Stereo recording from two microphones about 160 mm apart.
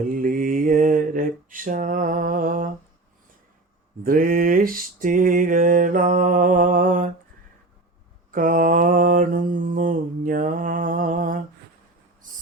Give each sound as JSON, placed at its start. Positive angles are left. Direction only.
{"t": 0.0, "sound": "mantra", "side_deg": -60}
{"t": 4.0, "sound": "mantra", "side_deg": -60}
{"t": 8.3, "sound": "mantra", "side_deg": -60}
{"t": 12.2, "sound": "owl", "side_deg": -55}